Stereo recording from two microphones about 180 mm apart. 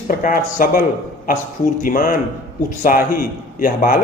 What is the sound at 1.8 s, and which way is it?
A man's voice, 50° left (ahead or behind).